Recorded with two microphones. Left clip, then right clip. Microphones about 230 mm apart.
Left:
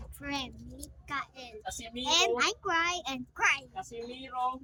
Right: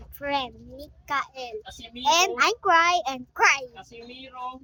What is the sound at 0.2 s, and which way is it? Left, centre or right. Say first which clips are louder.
A child's voice: right 10 dB; centre.